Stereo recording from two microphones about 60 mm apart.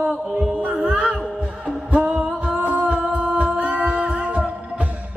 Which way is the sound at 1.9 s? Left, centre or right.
Centre.